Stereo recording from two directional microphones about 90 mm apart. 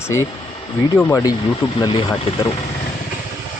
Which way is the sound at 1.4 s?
65° left (ahead or behind).